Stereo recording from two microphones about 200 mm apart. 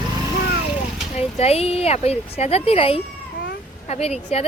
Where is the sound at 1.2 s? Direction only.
30° left (ahead or behind).